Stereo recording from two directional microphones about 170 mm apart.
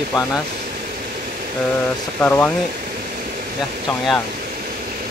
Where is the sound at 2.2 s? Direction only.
10° left (ahead or behind).